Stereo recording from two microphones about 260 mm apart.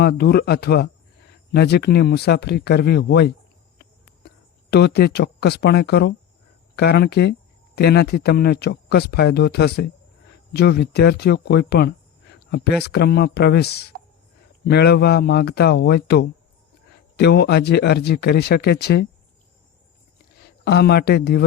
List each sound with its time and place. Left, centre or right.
0.0 s speech: left
4.7 s speech: left
20.7 s speech: left